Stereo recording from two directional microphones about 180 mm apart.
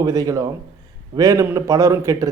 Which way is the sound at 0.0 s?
20° right (ahead or behind).